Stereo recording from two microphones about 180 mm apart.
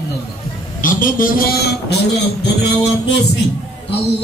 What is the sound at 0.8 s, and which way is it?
A man's voice, 50° left (ahead or behind).